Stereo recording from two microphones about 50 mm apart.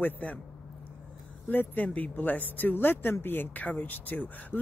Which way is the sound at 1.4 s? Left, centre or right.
Left.